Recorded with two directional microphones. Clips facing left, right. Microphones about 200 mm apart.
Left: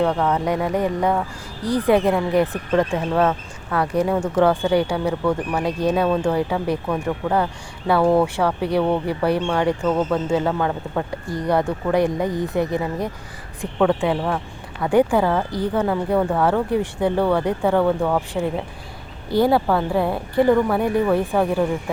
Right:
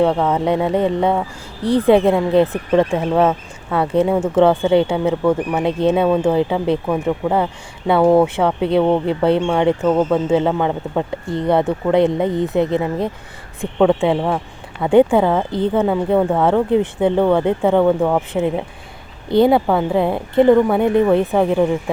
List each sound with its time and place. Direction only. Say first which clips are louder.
0.0 s speech: right 4 dB; 25° right (ahead or behind)